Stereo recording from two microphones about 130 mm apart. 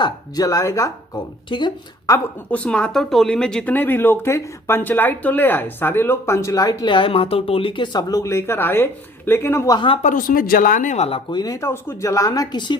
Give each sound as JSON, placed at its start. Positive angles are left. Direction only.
{"t": 0.0, "sound": "speech", "side_deg": 25}
{"t": 1.5, "sound": "speech", "side_deg": 35}
{"t": 2.5, "sound": "speech", "side_deg": 10}
{"t": 9.7, "sound": "a woman's voice", "side_deg": 40}
{"t": 10.0, "sound": "speech", "side_deg": 85}
{"t": 11.3, "sound": "speech", "side_deg": 30}